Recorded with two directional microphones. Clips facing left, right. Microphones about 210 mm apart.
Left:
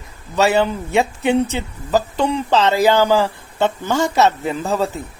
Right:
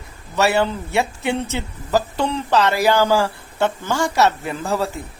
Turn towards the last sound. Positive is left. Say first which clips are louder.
# left 3 dB
turn(degrees=20)  # may be behind; listen again after turning